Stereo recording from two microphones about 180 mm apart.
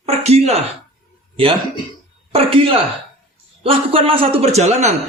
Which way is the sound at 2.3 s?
30° right (ahead or behind).